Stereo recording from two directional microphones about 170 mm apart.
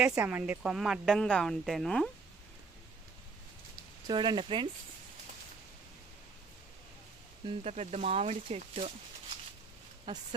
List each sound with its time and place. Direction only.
0.0 s a woman's voice: 10° right (ahead or behind)
4.0 s speech: 25° right (ahead or behind)
7.4 s speech: 40° right (ahead or behind)
10.1 s speech: 25° right (ahead or behind)